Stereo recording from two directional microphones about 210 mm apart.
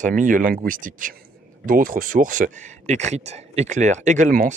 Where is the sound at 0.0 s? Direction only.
40° right (ahead or behind).